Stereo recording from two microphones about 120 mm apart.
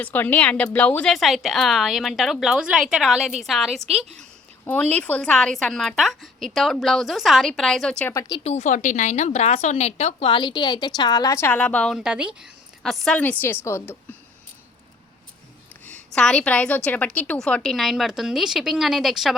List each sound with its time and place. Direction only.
0.0 s a woman's voice: 15° left (ahead or behind)
3.8 s a woman's voice: 65° right (ahead or behind)
4.6 s a woman's voice: 10° left (ahead or behind)
8.4 s a woman's voice: 80° left
10.2 s a woman's voice: 40° left (ahead or behind)
11.3 s a woman's voice: 15° left (ahead or behind)
11.9 s speech: 5° right (ahead or behind)
12.8 s a woman's voice: centre (ahead or behind)
13.7 s a woman's voice: 20° left (ahead or behind)
15.9 s a woman's voice: 5° left (ahead or behind)